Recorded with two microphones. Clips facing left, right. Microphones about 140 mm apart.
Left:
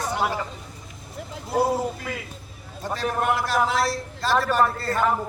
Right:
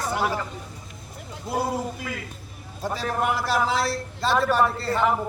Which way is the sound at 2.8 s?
5° right (ahead or behind).